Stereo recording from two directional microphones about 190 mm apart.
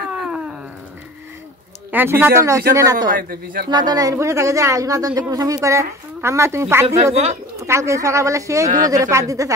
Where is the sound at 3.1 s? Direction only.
50° right (ahead or behind).